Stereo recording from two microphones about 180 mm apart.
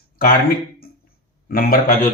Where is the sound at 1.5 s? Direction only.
55° left (ahead or behind).